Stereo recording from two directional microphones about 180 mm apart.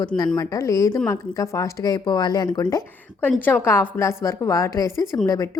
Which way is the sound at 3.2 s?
10° left (ahead or behind).